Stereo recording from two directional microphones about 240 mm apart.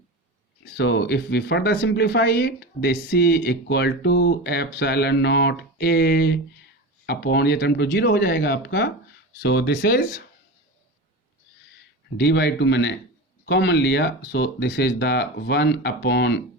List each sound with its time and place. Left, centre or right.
0.8 s speech: left
12.1 s speech: left